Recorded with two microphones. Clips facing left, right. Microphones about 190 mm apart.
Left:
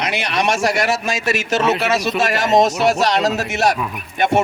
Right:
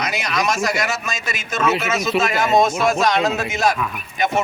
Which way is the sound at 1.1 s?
75° left (ahead or behind).